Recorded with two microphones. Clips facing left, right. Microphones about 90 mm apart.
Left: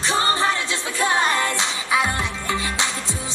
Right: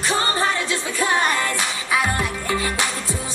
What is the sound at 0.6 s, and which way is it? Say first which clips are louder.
Music: right 1 dB; 25° left (ahead or behind).